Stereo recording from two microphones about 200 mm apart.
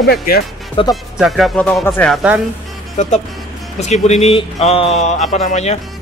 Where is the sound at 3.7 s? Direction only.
35° left (ahead or behind).